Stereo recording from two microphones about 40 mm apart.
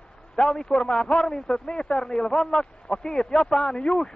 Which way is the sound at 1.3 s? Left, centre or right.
Centre.